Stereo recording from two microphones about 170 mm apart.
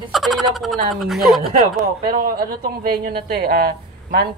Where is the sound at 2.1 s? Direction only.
60° right (ahead or behind).